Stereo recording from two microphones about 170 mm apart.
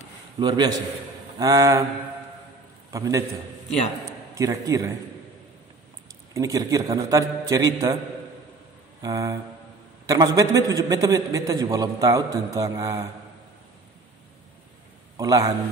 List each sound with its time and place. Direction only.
0.4 s a man's voice: 25° right (ahead or behind)
2.9 s a man's voice: 20° right (ahead or behind)
4.4 s a man's voice: 20° right (ahead or behind)
6.3 s a man's voice: 20° right (ahead or behind)
9.0 s a man's voice: 20° right (ahead or behind)
15.1 s a man's voice: 20° right (ahead or behind)